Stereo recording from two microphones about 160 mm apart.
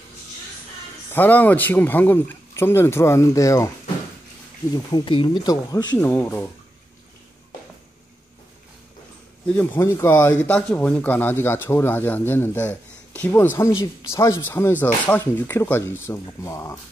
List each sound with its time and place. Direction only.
1.1 s speech: 10° left (ahead or behind)
4.9 s speech: 30° left (ahead or behind)
5.9 s speech: 15° left (ahead or behind)
9.5 s speech: 10° left (ahead or behind)